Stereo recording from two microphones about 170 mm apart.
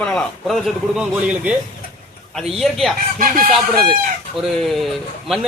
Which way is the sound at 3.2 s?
55° right (ahead or behind).